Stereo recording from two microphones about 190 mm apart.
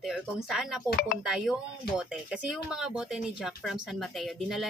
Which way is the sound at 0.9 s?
45° left (ahead or behind).